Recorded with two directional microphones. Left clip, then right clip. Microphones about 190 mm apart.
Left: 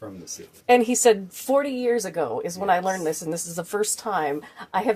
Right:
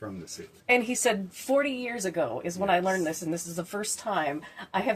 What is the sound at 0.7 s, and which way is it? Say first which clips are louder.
A woman's voice: left 7 dB; 40° left (ahead or behind).